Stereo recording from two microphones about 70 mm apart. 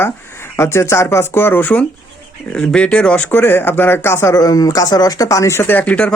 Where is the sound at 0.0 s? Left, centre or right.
Left.